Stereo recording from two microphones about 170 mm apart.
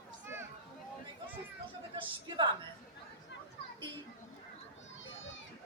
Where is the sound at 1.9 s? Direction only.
25° right (ahead or behind).